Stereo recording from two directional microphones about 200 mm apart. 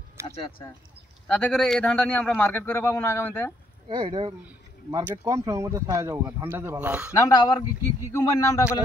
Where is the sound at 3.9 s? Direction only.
25° right (ahead or behind).